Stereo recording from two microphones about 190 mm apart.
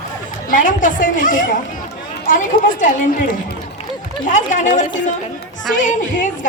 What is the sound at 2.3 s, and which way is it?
Speech, 45° left (ahead or behind).